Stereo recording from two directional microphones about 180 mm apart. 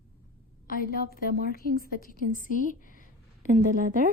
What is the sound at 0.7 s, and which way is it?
A woman's voice, 55° left (ahead or behind).